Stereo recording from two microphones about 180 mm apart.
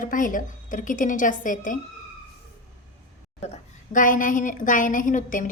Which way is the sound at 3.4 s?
40° left (ahead or behind).